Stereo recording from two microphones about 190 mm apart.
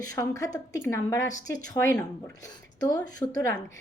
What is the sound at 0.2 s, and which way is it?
A woman's voice, 15° left (ahead or behind).